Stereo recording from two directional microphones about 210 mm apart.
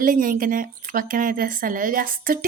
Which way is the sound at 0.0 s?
40° right (ahead or behind).